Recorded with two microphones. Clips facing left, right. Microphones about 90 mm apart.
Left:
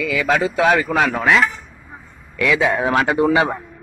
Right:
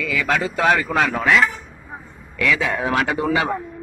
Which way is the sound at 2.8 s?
30° left (ahead or behind).